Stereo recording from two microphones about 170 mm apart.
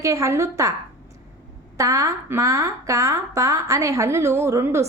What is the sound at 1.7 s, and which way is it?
A woman's voice, 20° right (ahead or behind).